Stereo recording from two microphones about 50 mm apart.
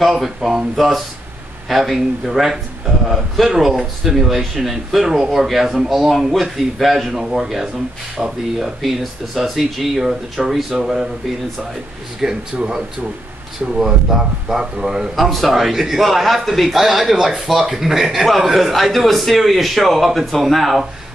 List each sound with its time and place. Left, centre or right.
0.0 s a man's voice: centre
12.2 s a man's voice: centre